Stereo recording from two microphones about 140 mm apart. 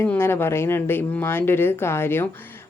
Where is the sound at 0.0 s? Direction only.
15° left (ahead or behind).